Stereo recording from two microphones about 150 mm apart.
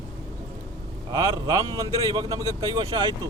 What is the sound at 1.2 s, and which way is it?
A man's voice, 20° right (ahead or behind).